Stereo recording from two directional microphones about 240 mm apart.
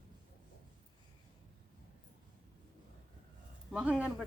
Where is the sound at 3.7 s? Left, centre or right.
Centre.